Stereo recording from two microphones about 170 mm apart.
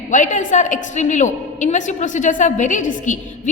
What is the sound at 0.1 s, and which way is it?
A woman's voice, 45° left (ahead or behind).